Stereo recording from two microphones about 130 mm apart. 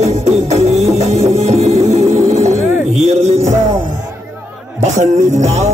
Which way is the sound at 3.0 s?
60° right (ahead or behind).